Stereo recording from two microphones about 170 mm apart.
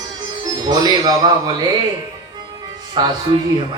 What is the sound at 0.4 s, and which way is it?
Speech, 25° right (ahead or behind).